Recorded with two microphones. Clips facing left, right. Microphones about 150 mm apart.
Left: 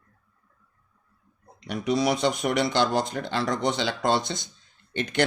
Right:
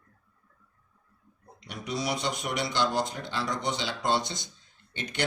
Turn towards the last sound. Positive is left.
turn(degrees=80)